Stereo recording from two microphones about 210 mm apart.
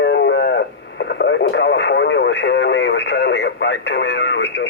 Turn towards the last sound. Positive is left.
turn(degrees=55)  # may be behind; listen again after turning